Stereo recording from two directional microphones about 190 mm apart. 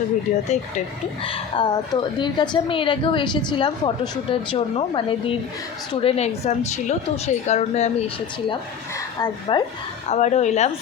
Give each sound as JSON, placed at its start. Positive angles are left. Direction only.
{"t": 1.2, "sound": "a woman's voice", "side_deg": 25}
{"t": 9.1, "sound": "a woman's voice", "side_deg": 20}
{"t": 10.1, "sound": "speech", "side_deg": 40}